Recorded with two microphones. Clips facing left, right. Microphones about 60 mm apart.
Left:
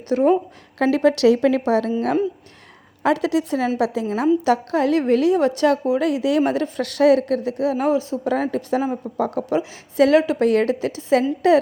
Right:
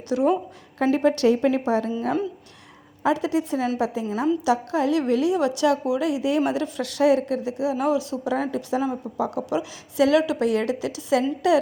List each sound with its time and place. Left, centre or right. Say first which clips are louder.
0.1 s a woman's voice: left 4 dB; left
0.8 s a woman's voice: left 3 dB; left
3.0 s a woman's voice: left 3 dB; left
4.4 s a woman's voice: left 3 dB; left
4.9 s a woman's voice: left 6 dB; left
6.0 s a woman's voice: left 3 dB; left
6.4 s a woman's voice: left 3 dB; left
7.9 s a woman's voice: left 3 dB; left